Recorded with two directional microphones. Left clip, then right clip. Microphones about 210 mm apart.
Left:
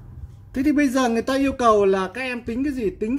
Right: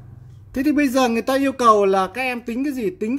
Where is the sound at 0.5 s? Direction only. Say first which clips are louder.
Right 1 dB; 15° right (ahead or behind).